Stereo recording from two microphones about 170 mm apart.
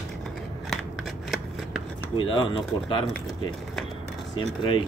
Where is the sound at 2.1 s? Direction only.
25° left (ahead or behind).